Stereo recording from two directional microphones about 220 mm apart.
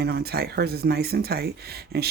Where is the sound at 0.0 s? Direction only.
45° right (ahead or behind).